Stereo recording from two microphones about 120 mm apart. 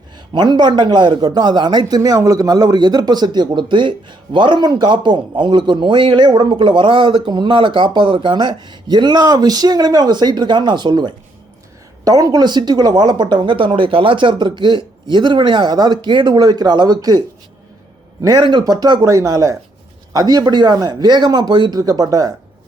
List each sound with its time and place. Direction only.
0.3 s a man's voice: 40° right (ahead or behind)
18.3 s a man's voice: 40° right (ahead or behind)